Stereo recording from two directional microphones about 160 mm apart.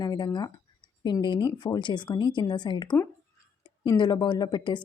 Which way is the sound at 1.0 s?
30° left (ahead or behind).